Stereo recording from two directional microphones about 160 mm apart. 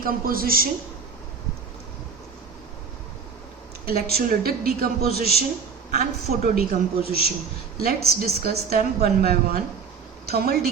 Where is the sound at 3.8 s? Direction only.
75° right (ahead or behind).